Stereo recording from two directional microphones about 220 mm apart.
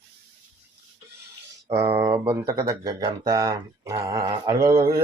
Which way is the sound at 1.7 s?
10° right (ahead or behind).